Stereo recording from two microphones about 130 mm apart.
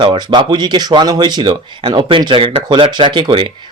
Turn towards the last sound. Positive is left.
turn(degrees=-40)  # may be behind; listen again after turning